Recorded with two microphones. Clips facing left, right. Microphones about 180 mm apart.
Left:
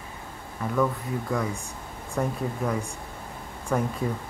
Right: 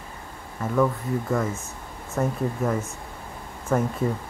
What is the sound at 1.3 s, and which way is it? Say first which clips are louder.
Speech: right 3 dB; 5° right (ahead or behind).